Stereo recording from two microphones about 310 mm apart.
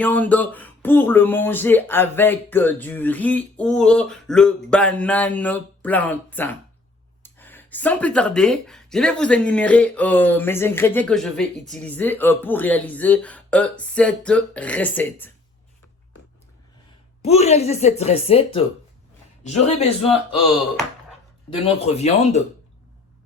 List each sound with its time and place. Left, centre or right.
0.0 s speech: centre
17.2 s a man's voice: left
21.6 s speech: centre